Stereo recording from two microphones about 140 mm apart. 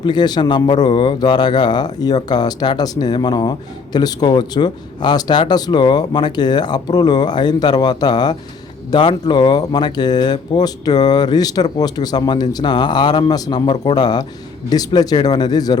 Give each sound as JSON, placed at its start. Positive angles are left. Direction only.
{"t": 0.0, "sound": "speech", "side_deg": 30}